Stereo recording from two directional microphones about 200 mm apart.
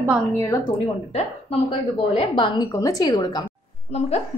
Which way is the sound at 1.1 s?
30° left (ahead or behind).